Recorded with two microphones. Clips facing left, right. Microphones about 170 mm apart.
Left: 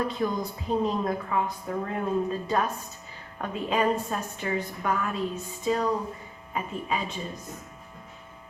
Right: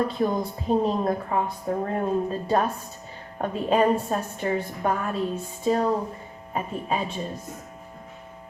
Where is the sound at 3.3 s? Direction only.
35° right (ahead or behind).